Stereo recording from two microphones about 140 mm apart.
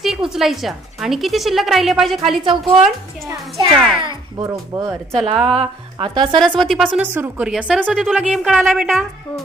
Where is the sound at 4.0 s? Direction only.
30° right (ahead or behind).